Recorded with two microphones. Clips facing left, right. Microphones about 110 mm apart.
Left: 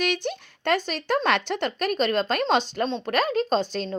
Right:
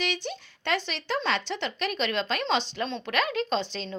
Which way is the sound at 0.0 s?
50° left (ahead or behind).